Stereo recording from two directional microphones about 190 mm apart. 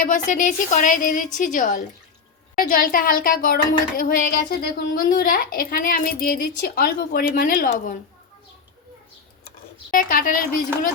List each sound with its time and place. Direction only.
0.0 s speech: 45° left (ahead or behind)
9.9 s speech: 45° left (ahead or behind)